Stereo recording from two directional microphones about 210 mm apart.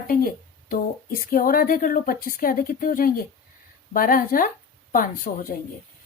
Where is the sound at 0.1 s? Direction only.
45° left (ahead or behind).